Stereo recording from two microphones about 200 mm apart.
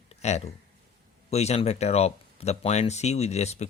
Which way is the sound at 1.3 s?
30° left (ahead or behind).